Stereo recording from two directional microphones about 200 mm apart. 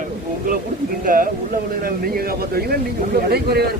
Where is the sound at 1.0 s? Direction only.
45° right (ahead or behind).